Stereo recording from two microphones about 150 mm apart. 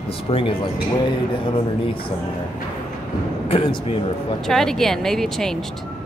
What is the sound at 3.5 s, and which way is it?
Speech, 40° left (ahead or behind).